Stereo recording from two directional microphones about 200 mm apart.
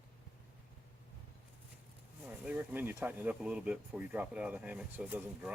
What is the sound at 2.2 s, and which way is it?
Speech, 5° right (ahead or behind).